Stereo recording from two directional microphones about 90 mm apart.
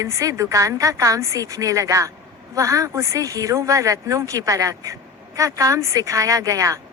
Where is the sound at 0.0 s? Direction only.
35° right (ahead or behind).